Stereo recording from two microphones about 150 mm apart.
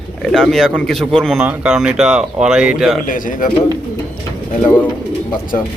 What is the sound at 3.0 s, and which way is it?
Speech, 65° left (ahead or behind).